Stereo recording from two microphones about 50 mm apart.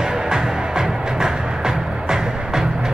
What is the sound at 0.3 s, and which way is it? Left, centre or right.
Music, centre.